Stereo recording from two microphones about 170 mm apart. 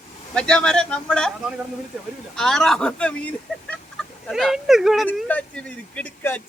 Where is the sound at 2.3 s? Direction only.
5° left (ahead or behind).